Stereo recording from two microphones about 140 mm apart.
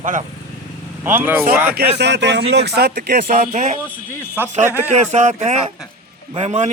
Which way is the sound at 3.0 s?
70° right (ahead or behind).